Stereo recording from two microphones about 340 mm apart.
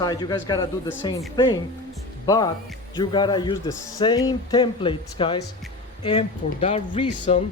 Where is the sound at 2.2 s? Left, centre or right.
Centre.